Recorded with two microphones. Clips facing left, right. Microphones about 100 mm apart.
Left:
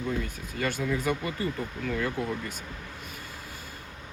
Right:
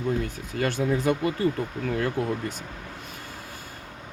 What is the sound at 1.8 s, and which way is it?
Speech, 45° right (ahead or behind).